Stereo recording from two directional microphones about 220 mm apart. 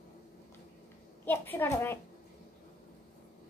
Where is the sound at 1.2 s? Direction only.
10° left (ahead or behind).